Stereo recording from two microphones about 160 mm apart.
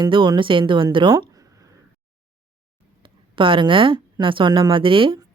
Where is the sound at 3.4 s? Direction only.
30° right (ahead or behind).